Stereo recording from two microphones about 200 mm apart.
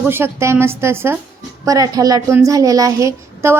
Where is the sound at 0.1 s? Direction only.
10° right (ahead or behind).